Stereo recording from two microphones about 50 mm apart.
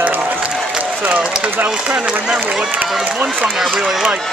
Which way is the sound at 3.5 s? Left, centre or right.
Centre.